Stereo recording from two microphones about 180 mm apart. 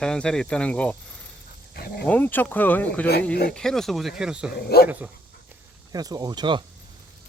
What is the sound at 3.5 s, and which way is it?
Speech, centre (ahead or behind).